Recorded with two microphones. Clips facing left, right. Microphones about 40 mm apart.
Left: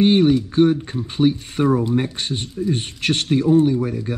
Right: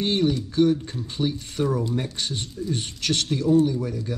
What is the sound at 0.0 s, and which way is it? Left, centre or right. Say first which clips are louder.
Speech: left 8 dB; left.